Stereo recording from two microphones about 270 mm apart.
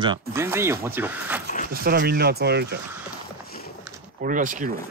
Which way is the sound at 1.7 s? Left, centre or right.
Right.